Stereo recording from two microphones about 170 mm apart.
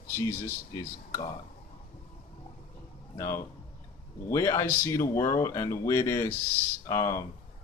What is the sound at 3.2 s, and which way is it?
Speech, 15° left (ahead or behind).